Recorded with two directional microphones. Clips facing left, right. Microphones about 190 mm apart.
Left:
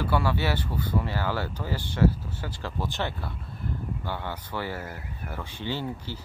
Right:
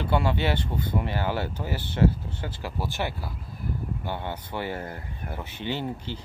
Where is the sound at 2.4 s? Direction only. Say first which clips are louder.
Even; 15° right (ahead or behind).